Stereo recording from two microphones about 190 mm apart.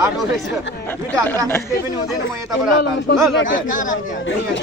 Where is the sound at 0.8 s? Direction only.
10° left (ahead or behind).